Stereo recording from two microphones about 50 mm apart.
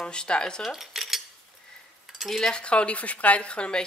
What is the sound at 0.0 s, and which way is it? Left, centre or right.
Speech, centre.